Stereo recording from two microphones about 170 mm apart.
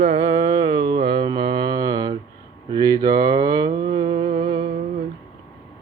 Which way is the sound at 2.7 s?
25° right (ahead or behind).